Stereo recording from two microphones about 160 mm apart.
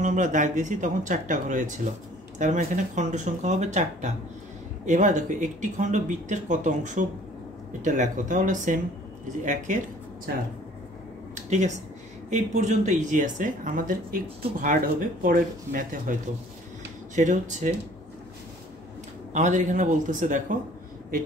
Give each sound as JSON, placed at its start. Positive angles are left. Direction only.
{"t": 0.0, "sound": "speech", "side_deg": -50}
{"t": 12.3, "sound": "speech", "side_deg": -50}
{"t": 19.3, "sound": "speech", "side_deg": -50}